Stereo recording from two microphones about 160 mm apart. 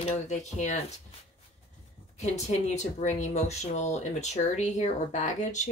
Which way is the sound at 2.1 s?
45° left (ahead or behind).